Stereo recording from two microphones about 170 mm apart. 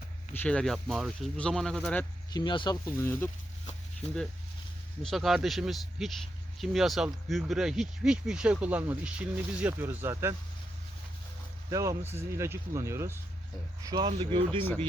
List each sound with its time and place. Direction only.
0.3 s speech: 5° left (ahead or behind)
2.3 s speech: 25° left (ahead or behind)
5.0 s speech: centre (ahead or behind)
11.7 s speech: 20° right (ahead or behind)